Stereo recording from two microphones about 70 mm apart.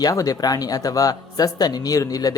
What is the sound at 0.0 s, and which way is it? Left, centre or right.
Speech, left.